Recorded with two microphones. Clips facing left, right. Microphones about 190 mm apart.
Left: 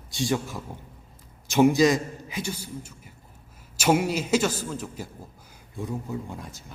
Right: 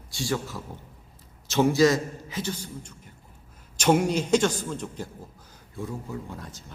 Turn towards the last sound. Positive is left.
turn(degrees=15)  # may be behind; listen again after turning